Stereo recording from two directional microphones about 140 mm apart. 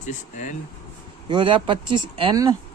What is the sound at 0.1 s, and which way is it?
Speech, 60° left (ahead or behind).